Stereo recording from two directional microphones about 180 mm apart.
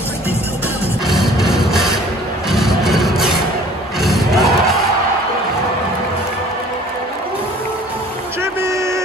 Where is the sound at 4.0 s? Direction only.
Centre (ahead or behind).